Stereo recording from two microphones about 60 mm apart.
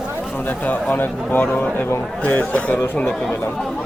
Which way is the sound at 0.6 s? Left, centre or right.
Left.